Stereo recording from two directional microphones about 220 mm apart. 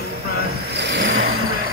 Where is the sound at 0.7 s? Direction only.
55° right (ahead or behind).